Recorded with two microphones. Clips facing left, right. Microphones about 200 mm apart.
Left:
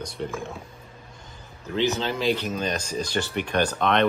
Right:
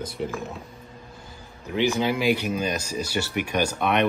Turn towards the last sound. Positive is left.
turn(degrees=-10)  # may be behind; listen again after turning